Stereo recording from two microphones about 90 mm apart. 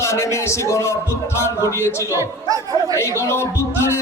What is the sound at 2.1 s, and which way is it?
Speech, 40° right (ahead or behind).